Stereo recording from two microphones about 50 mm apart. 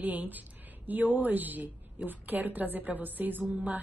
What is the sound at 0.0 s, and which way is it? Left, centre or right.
A woman's voice, right.